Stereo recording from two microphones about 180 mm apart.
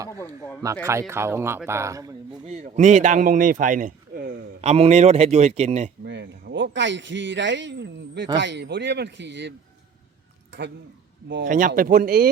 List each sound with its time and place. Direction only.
0.1 s speech: 15° left (ahead or behind)
0.9 s speech: 15° right (ahead or behind)
2.5 s a man's voice: 40° right (ahead or behind)
4.6 s speech: 35° right (ahead or behind)
6.1 s a man's voice: 80° right
11.4 s a man's voice: 45° right (ahead or behind)